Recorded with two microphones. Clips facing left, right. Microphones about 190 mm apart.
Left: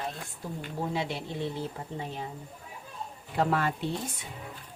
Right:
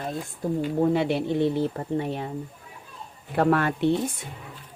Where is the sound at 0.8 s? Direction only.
60° right (ahead or behind).